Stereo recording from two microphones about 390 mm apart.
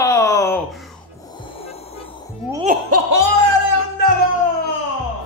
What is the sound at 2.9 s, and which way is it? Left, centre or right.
Music, right.